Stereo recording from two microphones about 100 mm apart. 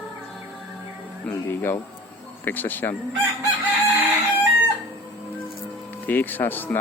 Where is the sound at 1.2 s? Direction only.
20° left (ahead or behind).